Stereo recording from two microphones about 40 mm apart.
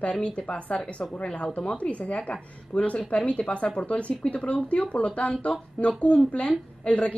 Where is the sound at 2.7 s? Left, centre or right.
Centre.